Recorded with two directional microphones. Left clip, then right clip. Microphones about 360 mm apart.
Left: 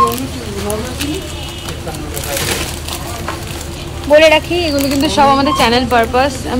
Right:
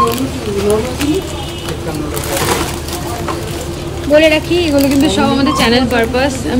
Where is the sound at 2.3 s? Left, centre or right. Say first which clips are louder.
Right 3 dB; centre.